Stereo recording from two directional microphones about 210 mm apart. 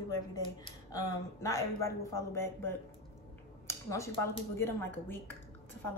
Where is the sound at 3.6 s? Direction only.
15° left (ahead or behind).